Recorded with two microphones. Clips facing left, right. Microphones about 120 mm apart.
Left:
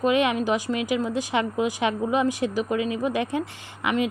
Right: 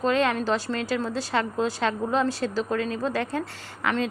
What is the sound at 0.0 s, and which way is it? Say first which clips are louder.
Speech: left 2 dB; 15° left (ahead or behind).